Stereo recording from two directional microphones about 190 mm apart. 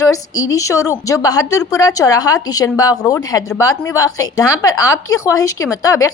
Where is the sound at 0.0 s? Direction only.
15° left (ahead or behind).